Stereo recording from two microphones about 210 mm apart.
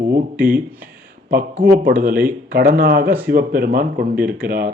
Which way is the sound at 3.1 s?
10° right (ahead or behind).